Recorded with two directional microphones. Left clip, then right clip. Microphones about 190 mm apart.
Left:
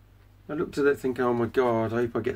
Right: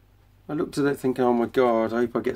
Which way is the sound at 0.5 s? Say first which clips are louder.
Even; 30° right (ahead or behind).